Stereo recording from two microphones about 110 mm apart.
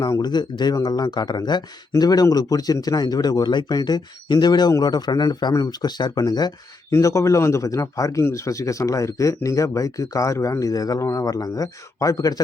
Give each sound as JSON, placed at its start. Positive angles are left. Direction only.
{"t": 0.0, "sound": "speech", "side_deg": 40}